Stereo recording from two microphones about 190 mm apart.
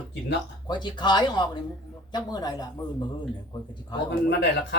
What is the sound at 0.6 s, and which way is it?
Speech, 25° left (ahead or behind).